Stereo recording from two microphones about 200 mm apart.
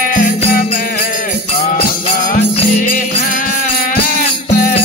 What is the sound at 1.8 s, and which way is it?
Music, 35° left (ahead or behind).